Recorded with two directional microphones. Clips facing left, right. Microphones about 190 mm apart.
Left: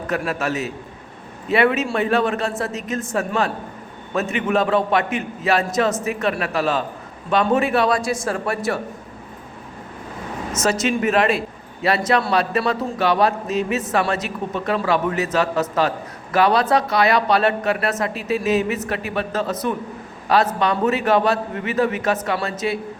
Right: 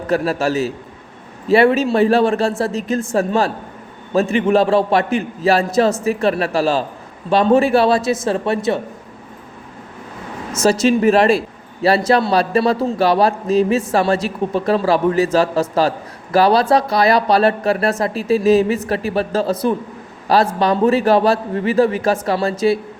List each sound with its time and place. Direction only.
0.1 s a man's voice: 35° right (ahead or behind)
10.6 s a man's voice: 35° right (ahead or behind)